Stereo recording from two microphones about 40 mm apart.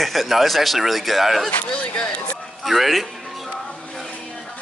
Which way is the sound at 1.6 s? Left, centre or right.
Left.